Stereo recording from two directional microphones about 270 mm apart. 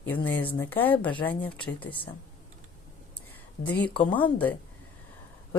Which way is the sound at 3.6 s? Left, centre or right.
Left.